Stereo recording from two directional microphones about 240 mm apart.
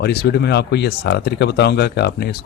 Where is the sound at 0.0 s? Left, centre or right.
Left.